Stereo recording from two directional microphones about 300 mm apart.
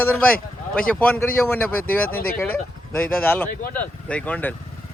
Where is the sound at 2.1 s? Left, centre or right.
Left.